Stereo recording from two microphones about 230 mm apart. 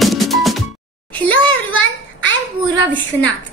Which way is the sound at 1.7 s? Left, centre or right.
Left.